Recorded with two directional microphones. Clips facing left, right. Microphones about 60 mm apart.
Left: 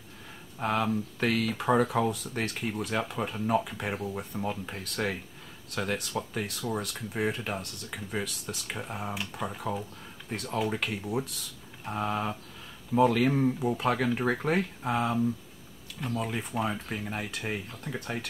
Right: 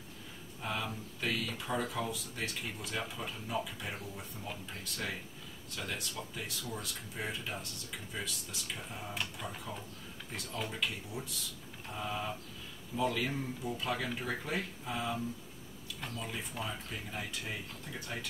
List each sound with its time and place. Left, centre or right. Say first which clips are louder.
0.6 s speech: left 10 dB; left
4.5 s speech: left 8 dB; left
16.2 s speech: left 10 dB; left